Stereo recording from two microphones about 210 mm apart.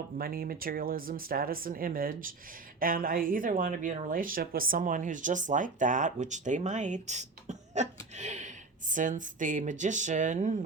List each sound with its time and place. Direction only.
0.2 s speech: 45° right (ahead or behind)